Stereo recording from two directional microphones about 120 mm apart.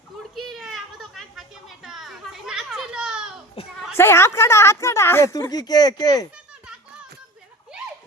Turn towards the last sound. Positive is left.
turn(degrees=35)  # may be behind; listen again after turning